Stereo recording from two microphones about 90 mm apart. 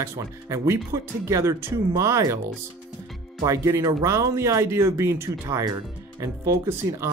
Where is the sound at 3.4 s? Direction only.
35° right (ahead or behind).